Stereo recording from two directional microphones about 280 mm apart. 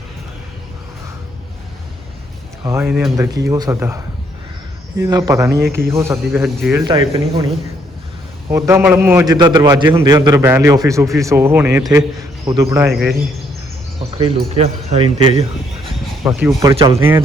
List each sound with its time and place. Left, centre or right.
2.6 s a man's voice: centre
6.8 s a man's voice: centre
8.4 s a man's voice: centre
14.2 s speech: right
16.2 s speech: centre
16.6 s a man's voice: centre